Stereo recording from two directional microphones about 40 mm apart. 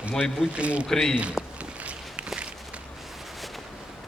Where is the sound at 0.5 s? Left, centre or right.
Right.